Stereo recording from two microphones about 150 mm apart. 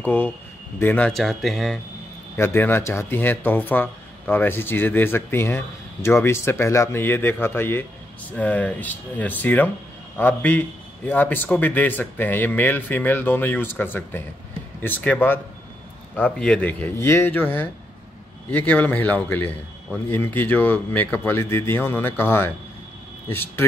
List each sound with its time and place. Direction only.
0.0 s speech: 10° left (ahead or behind)
2.3 s a man's voice: 15° left (ahead or behind)